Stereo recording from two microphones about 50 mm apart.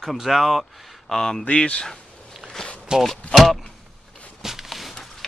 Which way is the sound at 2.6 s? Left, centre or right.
Centre.